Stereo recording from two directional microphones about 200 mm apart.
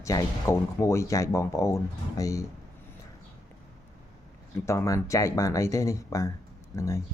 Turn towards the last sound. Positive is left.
turn(degrees=15)  # may be behind; listen again after turning